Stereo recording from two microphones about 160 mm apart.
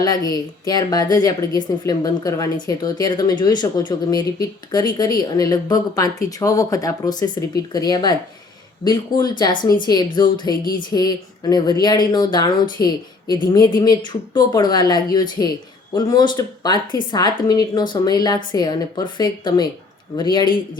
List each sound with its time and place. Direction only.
0.0 s speech: 25° left (ahead or behind)